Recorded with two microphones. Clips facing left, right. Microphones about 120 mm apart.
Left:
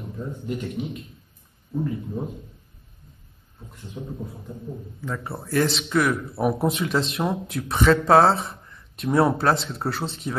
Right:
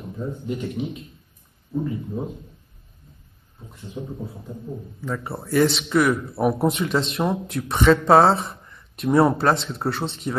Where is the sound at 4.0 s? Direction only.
Centre (ahead or behind).